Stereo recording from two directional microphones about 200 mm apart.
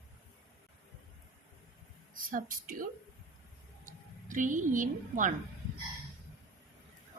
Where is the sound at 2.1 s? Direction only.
45° right (ahead or behind).